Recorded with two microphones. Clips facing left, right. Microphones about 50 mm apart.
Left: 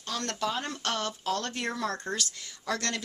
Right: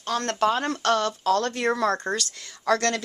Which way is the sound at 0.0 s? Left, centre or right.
Right.